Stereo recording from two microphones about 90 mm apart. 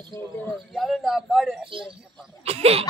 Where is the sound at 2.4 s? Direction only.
90° right.